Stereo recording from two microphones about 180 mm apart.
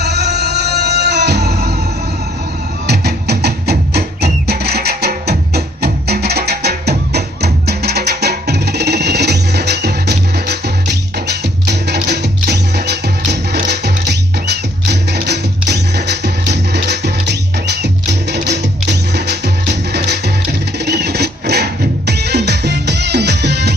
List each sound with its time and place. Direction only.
0.0 s music: 65° right (ahead or behind)
2.8 s music: 65° right (ahead or behind)